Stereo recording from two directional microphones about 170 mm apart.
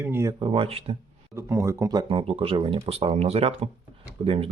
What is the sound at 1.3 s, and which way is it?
Speech, 15° right (ahead or behind).